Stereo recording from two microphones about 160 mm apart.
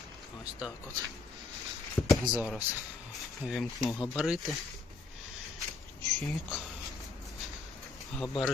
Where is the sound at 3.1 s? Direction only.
Centre (ahead or behind).